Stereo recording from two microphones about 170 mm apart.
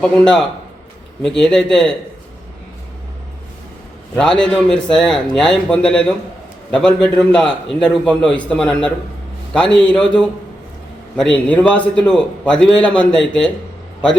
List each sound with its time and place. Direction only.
1.2 s a man's voice: 5° left (ahead or behind)
4.1 s a man's voice: 5° left (ahead or behind)